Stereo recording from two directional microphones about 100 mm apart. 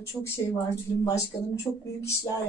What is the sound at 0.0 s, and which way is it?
Speech, 25° left (ahead or behind).